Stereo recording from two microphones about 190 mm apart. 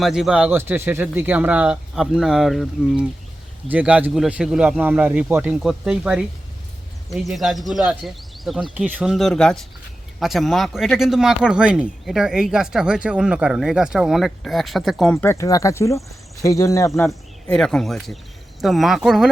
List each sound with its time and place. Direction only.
0.0 s speech: centre (ahead or behind)
15.1 s speech: 15° left (ahead or behind)
17.1 s speech: 5° left (ahead or behind)